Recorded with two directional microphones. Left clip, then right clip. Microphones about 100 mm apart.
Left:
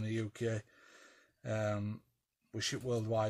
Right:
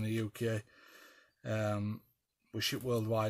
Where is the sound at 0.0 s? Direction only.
35° right (ahead or behind).